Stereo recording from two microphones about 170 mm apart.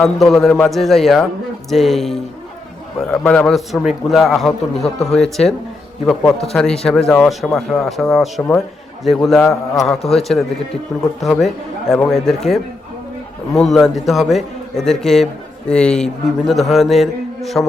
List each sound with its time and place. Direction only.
0.0 s a man's voice: centre (ahead or behind)